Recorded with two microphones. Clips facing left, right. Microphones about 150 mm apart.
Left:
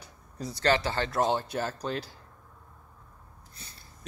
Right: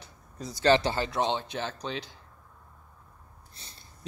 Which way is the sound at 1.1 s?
5° left (ahead or behind).